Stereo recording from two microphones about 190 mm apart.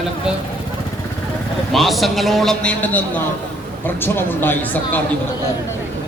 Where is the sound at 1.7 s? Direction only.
Centre (ahead or behind).